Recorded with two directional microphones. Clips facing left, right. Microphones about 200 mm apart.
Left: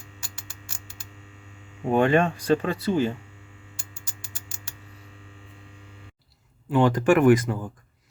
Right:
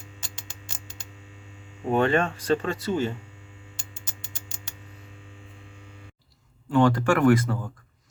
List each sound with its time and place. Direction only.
0.2 s a sound: 20° right (ahead or behind)
1.9 s speech: 15° left (ahead or behind)
3.8 s music: 20° right (ahead or behind)
6.7 s speech: 15° left (ahead or behind)